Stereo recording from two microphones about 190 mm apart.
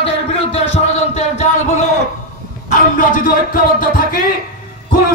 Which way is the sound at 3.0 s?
45° left (ahead or behind).